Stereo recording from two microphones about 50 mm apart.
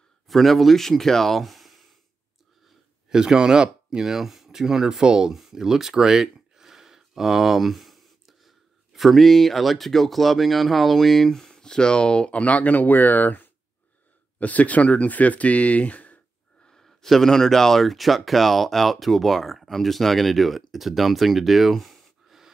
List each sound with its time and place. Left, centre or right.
0.3 s speech: centre
3.1 s speech: centre; by 16.2 s left
16.6 s speech: centre